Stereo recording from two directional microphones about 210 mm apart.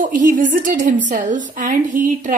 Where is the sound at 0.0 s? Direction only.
40° right (ahead or behind).